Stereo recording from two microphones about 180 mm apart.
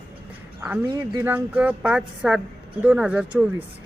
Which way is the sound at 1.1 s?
15° right (ahead or behind).